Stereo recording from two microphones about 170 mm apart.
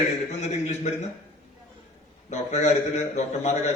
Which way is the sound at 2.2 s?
45° left (ahead or behind).